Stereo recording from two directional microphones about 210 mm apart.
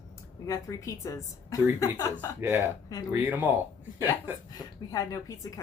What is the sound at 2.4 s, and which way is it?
Speech, 10° right (ahead or behind).